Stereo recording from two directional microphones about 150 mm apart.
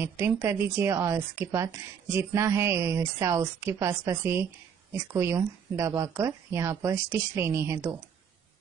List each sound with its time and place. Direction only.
0.0 s a woman's voice: 15° right (ahead or behind)